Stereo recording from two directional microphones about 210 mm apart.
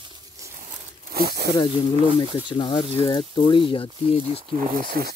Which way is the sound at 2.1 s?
25° left (ahead or behind).